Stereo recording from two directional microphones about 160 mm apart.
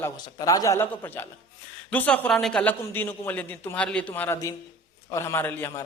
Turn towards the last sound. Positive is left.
turn(degrees=15)  # may be behind; listen again after turning